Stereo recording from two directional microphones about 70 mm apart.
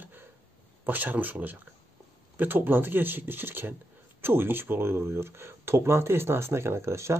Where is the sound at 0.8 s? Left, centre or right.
Right.